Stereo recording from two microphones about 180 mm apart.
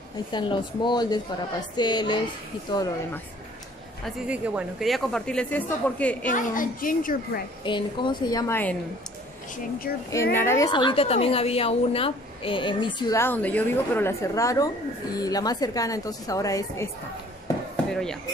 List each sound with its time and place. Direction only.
0.3 s a woman's voice: 25° left (ahead or behind)
4.0 s speech: 5° right (ahead or behind)
6.3 s a child's voice: 50° left (ahead or behind)
7.6 s a woman's voice: 25° left (ahead or behind)
10.3 s a woman's voice: 15° left (ahead or behind)
13.2 s a woman's voice: 10° left (ahead or behind)